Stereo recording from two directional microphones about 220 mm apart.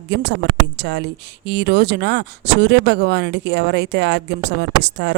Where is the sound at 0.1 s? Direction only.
50° right (ahead or behind).